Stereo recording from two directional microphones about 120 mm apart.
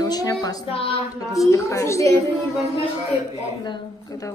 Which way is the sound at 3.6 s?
35° left (ahead or behind).